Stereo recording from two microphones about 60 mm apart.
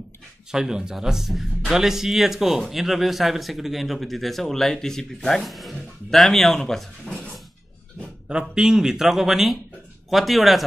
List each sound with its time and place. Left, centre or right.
0.5 s a man's voice: centre
8.3 s a man's voice: centre